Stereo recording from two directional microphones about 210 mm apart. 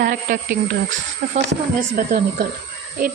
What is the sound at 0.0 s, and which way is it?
A woman's voice, 40° right (ahead or behind).